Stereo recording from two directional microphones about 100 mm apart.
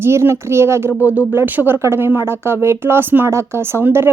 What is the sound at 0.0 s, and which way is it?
Speech, 25° right (ahead or behind).